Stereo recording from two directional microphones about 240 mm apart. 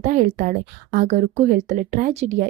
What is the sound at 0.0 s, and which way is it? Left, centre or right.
A woman's voice, right.